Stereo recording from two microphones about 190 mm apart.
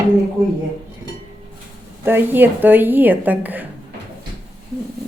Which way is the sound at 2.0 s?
10° right (ahead or behind).